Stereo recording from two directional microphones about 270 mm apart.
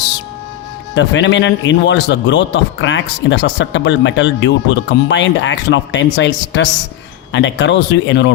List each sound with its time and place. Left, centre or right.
0.9 s a man's voice: left